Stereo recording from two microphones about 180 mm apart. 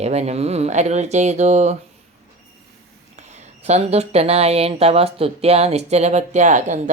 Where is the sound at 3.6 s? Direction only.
35° right (ahead or behind).